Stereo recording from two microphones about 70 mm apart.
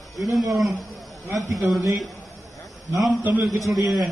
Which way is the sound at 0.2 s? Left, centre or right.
Centre.